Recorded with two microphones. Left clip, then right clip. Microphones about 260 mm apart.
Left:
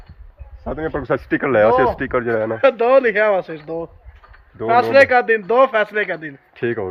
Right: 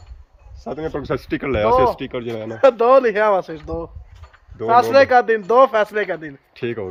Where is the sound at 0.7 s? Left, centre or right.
Centre.